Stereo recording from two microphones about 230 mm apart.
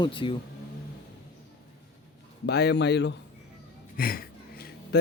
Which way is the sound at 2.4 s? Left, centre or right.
Left.